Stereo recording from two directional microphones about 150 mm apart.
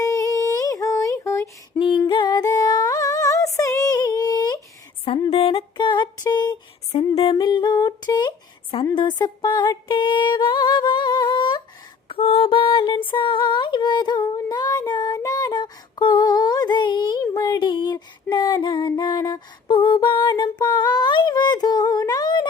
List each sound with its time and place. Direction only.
0.0 s music: 25° left (ahead or behind)
2.0 s music: 30° left (ahead or behind)
5.0 s a sound: 40° left (ahead or behind)
7.2 s humming: 35° left (ahead or behind)
9.0 s music: 30° left (ahead or behind)
12.0 s a sound: 40° left (ahead or behind)